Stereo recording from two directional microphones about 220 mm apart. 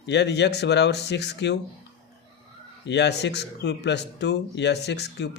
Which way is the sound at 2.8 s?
50° left (ahead or behind).